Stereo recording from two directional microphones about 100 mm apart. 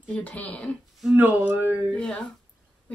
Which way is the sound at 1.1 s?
15° right (ahead or behind).